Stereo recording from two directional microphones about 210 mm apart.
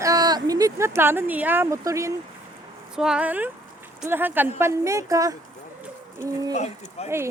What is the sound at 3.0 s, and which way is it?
Speech, 5° right (ahead or behind).